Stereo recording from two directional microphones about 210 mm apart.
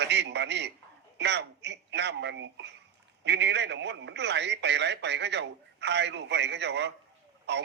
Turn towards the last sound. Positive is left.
turn(degrees=-55)  # may be behind; listen again after turning